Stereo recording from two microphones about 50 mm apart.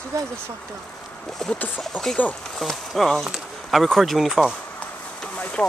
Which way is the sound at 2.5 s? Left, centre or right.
Centre.